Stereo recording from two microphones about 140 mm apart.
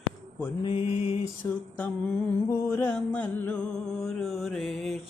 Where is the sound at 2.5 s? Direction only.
15° left (ahead or behind).